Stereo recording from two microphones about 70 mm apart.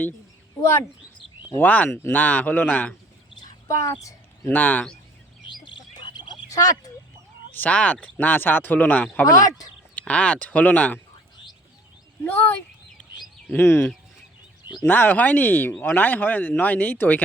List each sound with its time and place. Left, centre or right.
1.6 s speech: left
1.9 s speech: left
3.7 s speech: left
4.4 s speech: left
6.1 s a sound: left
7.5 s speech: left
9.2 s speech: left
9.9 s speech: centre
12.2 s speech: left
13.6 s speech: left